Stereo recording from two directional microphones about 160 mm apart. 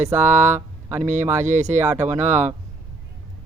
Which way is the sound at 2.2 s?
45° right (ahead or behind).